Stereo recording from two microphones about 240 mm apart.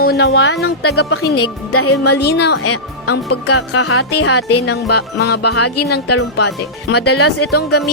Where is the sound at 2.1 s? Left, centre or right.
Left.